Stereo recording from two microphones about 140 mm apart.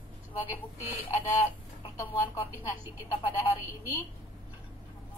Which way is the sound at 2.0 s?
20° left (ahead or behind).